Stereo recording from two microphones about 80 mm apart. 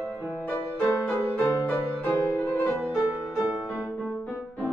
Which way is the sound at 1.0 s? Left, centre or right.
Left.